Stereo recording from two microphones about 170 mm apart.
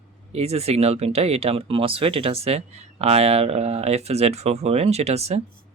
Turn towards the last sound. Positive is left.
turn(degrees=-40)  # may be behind; listen again after turning